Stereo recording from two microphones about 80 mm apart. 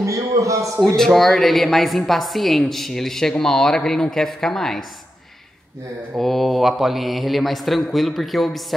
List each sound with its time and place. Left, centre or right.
0.0 s a man's voice: right
0.8 s a woman's voice: centre
6.1 s a woman's voice: centre